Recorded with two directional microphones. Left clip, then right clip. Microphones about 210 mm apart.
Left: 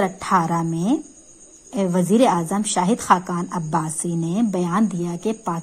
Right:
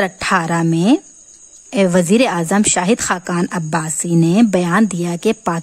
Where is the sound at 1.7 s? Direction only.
70° right (ahead or behind); by 3.9 s 55° right (ahead or behind).